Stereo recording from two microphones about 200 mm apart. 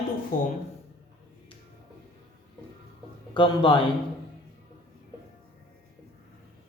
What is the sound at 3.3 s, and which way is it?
Speech, 25° left (ahead or behind).